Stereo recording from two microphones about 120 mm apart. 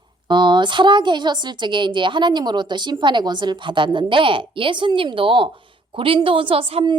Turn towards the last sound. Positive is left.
turn(degrees=-50)  # may be behind; listen again after turning